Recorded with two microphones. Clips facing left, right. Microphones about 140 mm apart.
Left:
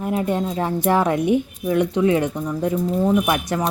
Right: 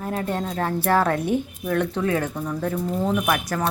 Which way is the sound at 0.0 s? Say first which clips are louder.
Left 5 dB; 15° left (ahead or behind).